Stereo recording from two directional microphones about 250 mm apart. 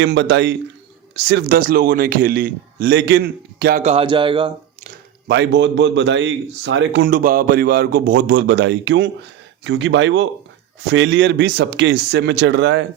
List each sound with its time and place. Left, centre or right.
0.0 s a man's voice: right; by 4.5 s centre
5.3 s a man's voice: right